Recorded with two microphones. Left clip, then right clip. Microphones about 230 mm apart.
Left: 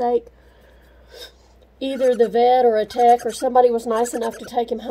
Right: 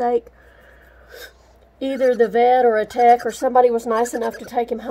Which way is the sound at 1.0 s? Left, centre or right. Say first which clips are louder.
Right 1 dB; centre.